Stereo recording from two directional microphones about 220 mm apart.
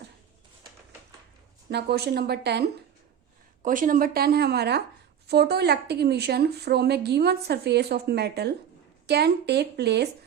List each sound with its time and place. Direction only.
1.7 s speech: 50° right (ahead or behind)
3.6 s speech: 35° right (ahead or behind)